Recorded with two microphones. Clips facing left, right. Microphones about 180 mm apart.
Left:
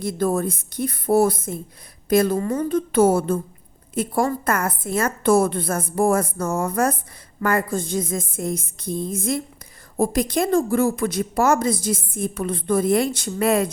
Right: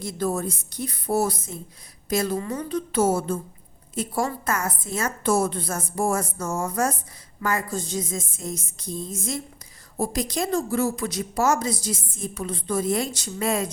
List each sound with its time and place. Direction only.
0.0 s a woman's voice: 55° left (ahead or behind)